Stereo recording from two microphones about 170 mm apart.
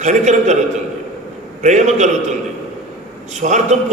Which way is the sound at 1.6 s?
45° right (ahead or behind).